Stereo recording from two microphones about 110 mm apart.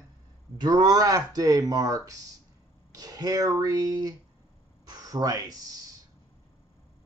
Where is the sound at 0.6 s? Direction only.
40° right (ahead or behind).